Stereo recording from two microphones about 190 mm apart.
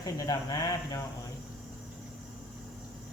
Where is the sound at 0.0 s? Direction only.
20° left (ahead or behind).